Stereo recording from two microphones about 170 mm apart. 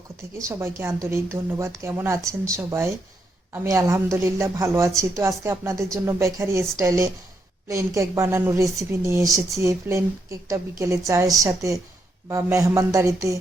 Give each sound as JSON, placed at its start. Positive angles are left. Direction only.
{"t": 0.3, "sound": "a woman's voice", "side_deg": -15}